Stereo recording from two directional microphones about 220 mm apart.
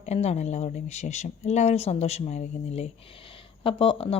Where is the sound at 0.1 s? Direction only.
30° left (ahead or behind).